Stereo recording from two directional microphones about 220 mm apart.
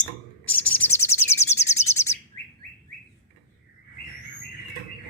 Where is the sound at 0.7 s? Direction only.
10° left (ahead or behind).